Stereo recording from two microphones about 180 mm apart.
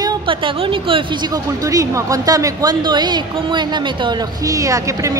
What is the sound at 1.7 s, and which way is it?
A woman's voice, 20° right (ahead or behind).